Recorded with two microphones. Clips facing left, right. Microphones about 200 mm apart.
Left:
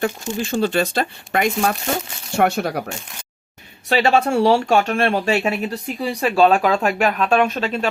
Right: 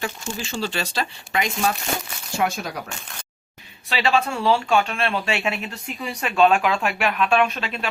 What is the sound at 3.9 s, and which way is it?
Speech, 45° left (ahead or behind).